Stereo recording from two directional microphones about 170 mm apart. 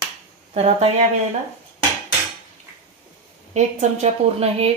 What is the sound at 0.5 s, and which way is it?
Speech, 35° right (ahead or behind).